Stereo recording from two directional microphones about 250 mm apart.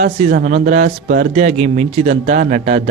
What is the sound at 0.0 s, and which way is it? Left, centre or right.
Speech, right.